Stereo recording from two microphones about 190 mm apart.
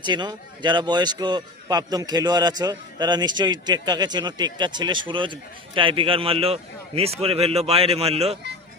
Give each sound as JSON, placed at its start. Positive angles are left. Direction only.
{"t": 0.0, "sound": "a man's voice", "side_deg": -25}